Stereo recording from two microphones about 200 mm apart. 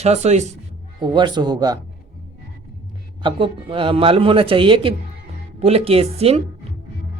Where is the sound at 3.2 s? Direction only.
25° right (ahead or behind).